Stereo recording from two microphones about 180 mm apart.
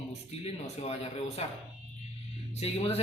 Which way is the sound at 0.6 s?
35° left (ahead or behind).